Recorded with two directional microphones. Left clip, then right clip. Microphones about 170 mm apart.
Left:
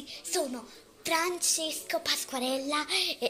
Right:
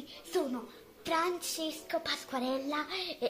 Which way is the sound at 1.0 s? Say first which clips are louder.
Left 3 dB; centre (ahead or behind).